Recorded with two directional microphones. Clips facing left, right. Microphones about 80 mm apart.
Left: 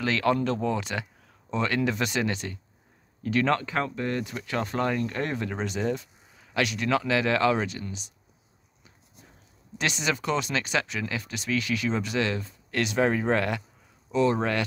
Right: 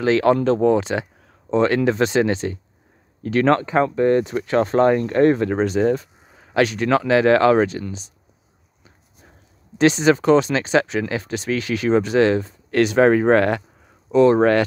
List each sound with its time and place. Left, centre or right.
0.0 s speech: right
3.3 s speech: right
3.6 s speech: right
9.8 s speech: right
12.7 s speech: right